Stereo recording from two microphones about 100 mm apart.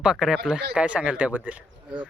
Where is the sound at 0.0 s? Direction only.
5° right (ahead or behind).